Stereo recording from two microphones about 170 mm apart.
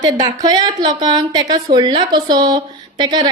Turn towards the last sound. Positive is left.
turn(degrees=-25)  # may be behind; listen again after turning